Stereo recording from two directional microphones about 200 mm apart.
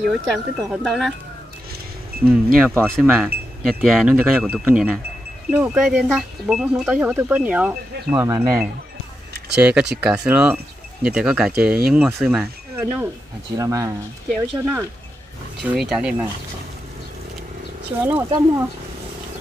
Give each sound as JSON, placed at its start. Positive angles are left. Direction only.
{"t": 0.0, "sound": "speech", "side_deg": 0}
{"t": 2.2, "sound": "speech", "side_deg": -10}
{"t": 8.3, "sound": "speech", "side_deg": -20}
{"t": 9.6, "sound": "speech", "side_deg": -5}
{"t": 13.6, "sound": "speech", "side_deg": -15}
{"t": 14.3, "sound": "speech", "side_deg": 0}
{"t": 18.0, "sound": "speech", "side_deg": -15}